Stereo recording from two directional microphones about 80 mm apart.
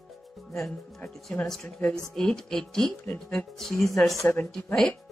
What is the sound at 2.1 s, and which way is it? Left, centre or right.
Speech, centre.